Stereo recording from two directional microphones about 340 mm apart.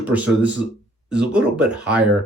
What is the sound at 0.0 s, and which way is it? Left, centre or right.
Speech, centre.